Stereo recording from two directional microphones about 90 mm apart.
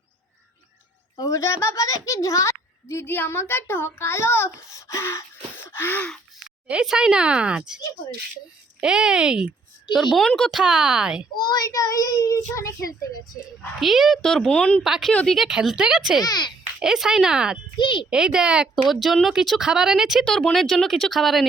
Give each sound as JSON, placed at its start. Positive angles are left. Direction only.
{"t": 1.2, "sound": "a child's voice", "side_deg": 35}
{"t": 5.6, "sound": "a sound", "side_deg": 25}
{"t": 6.7, "sound": "speech", "side_deg": -10}
{"t": 8.8, "sound": "speech", "side_deg": -10}
{"t": 10.6, "sound": "speech", "side_deg": -10}
{"t": 11.3, "sound": "a child's voice", "side_deg": 50}
{"t": 13.7, "sound": "speech", "side_deg": 0}
{"t": 14.8, "sound": "speech", "side_deg": -5}
{"t": 15.1, "sound": "speech", "side_deg": 10}
{"t": 15.4, "sound": "speech", "side_deg": -5}
{"t": 16.2, "sound": "a child's voice", "side_deg": 50}
{"t": 16.8, "sound": "speech", "side_deg": -5}
{"t": 17.7, "sound": "a child's voice", "side_deg": 60}
{"t": 18.1, "sound": "speech", "side_deg": -10}